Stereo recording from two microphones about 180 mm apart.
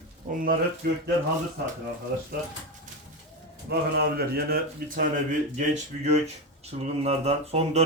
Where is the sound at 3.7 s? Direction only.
65° right (ahead or behind).